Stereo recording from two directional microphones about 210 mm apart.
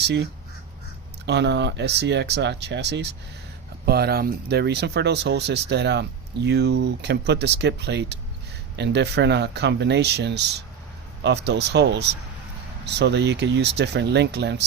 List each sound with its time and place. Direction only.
1.2 s speech: 55° right (ahead or behind)